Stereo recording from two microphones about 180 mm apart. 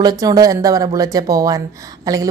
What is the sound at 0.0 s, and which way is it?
A woman's voice, 20° right (ahead or behind).